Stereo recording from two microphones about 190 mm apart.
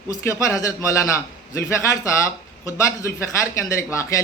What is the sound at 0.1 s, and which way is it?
Speech, 15° left (ahead or behind).